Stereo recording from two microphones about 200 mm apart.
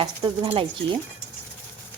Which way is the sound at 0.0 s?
25° right (ahead or behind).